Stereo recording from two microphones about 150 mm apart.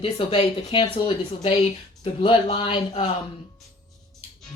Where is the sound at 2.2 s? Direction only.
35° left (ahead or behind).